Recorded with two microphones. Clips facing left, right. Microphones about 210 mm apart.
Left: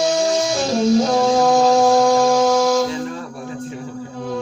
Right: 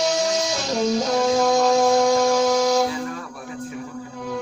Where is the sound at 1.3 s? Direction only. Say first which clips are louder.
Left 3 dB; 40° left (ahead or behind).